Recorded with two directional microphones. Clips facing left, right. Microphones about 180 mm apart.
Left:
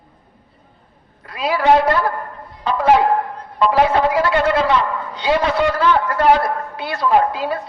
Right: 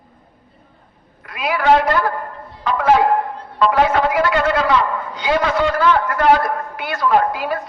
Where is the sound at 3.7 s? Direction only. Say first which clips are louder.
Left 1 dB; 30° left (ahead or behind).